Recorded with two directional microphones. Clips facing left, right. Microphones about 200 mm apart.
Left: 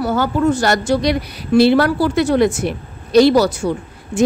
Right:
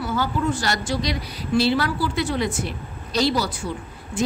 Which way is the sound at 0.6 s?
55° left (ahead or behind).